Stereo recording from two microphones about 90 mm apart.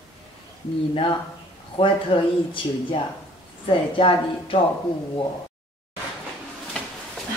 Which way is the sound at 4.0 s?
80° left.